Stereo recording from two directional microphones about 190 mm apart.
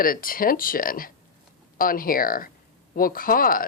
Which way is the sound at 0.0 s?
50° left (ahead or behind).